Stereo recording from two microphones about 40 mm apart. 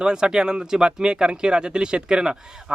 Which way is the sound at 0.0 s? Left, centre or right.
Centre.